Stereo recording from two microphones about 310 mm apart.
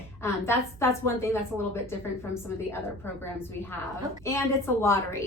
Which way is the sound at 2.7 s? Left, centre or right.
Centre.